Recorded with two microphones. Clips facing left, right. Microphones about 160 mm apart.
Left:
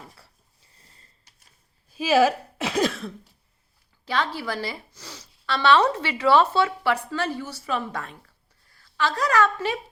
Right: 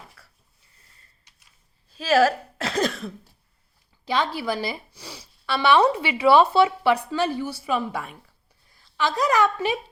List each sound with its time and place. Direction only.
0.8 s a sound: 30° left (ahead or behind)
1.9 s speech: 10° left (ahead or behind)
4.0 s a woman's voice: 15° right (ahead or behind)